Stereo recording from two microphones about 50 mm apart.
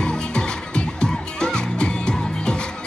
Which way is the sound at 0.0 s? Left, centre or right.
Centre.